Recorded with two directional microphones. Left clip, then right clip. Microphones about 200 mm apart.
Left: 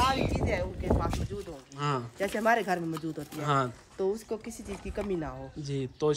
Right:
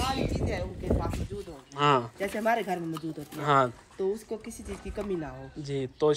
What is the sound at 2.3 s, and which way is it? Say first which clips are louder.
Speech: left 1 dB; 40° left (ahead or behind).